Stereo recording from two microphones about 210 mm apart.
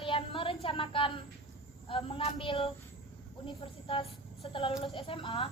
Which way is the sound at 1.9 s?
25° left (ahead or behind).